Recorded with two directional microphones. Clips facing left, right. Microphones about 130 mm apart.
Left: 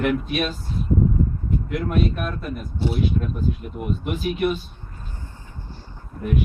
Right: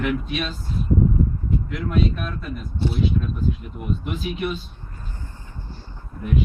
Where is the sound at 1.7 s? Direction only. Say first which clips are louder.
Left 1 dB; 50° left (ahead or behind).